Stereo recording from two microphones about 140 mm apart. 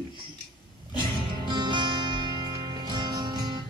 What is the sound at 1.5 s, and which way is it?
Music, 35° right (ahead or behind).